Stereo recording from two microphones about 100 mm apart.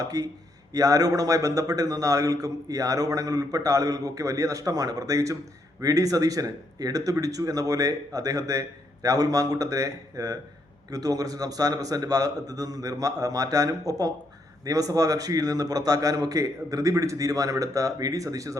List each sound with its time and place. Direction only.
0.0 s a man's voice: 40° right (ahead or behind)